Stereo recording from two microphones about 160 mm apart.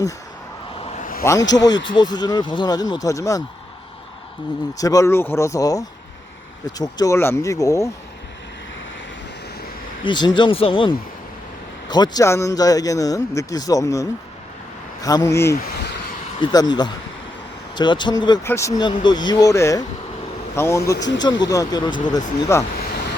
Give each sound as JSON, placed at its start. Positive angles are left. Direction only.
{"t": 0.9, "sound": "vehicle", "side_deg": 55}
{"t": 1.2, "sound": "a man's voice", "side_deg": 20}
{"t": 4.8, "sound": "a man's voice", "side_deg": 20}
{"t": 10.1, "sound": "a man's voice", "side_deg": 30}
{"t": 18.4, "sound": "speech", "side_deg": 15}
{"t": 18.9, "sound": "a man's voice", "side_deg": 25}